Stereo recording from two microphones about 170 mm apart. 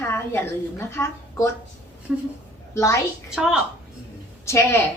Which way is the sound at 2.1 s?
5° right (ahead or behind).